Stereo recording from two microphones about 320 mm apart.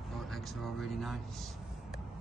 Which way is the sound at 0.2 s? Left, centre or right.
Centre.